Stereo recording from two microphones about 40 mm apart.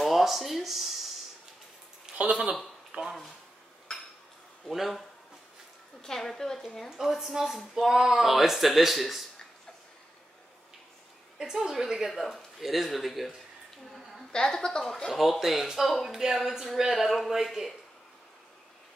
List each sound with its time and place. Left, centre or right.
0.0 s speech: centre
2.1 s a sound: centre
2.9 s speech: centre
4.6 s speech: centre
6.0 s a woman's voice: centre
6.9 s speech: centre
11.3 s speech: centre
12.1 s speech: centre
14.3 s a woman's voice: centre
15.0 s speech: centre